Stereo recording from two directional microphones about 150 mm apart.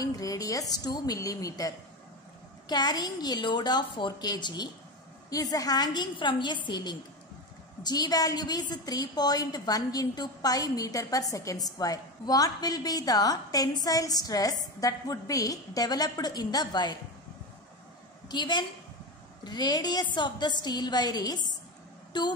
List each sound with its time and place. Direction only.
0.0 s a woman's voice: 25° left (ahead or behind)
2.7 s a woman's voice: 25° left (ahead or behind)
18.3 s a woman's voice: 30° left (ahead or behind)